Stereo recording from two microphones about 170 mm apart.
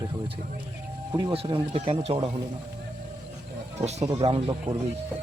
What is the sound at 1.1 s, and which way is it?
Speech, 30° right (ahead or behind).